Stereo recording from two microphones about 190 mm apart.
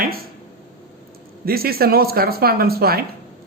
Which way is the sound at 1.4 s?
55° right (ahead or behind).